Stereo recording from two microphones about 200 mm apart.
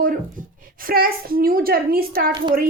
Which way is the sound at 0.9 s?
50° right (ahead or behind).